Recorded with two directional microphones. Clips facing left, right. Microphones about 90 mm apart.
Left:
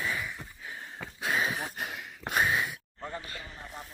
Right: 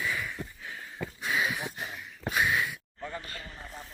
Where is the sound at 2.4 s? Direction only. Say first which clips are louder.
Even; 25° left (ahead or behind).